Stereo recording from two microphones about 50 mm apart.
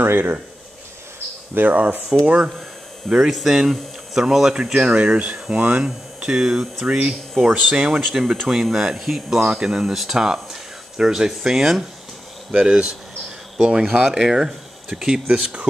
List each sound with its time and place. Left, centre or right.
0.0 s speech: right
1.5 s speech: right
3.2 s speech: centre; by 5.9 s right
5.9 s speech: centre
9.5 s speech: centre
12.5 s speech: right
14.1 s speech: centre
15.2 s speech: right